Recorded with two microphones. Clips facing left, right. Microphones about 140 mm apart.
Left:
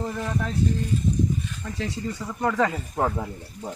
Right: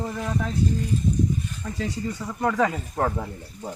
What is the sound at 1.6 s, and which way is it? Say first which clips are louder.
Speech: right 1 dB; 5° right (ahead or behind).